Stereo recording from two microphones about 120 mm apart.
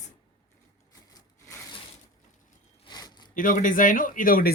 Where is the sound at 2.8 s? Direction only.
35° left (ahead or behind).